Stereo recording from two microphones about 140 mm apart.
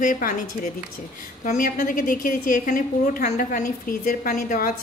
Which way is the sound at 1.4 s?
65° left (ahead or behind).